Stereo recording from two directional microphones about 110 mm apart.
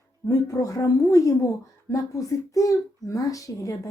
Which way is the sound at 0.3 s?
30° left (ahead or behind).